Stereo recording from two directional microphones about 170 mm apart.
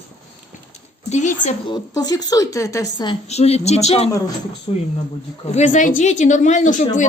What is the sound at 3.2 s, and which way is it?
Speech, 40° left (ahead or behind).